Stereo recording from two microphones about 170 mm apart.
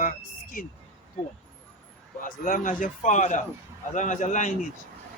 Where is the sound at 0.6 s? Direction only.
55° left (ahead or behind).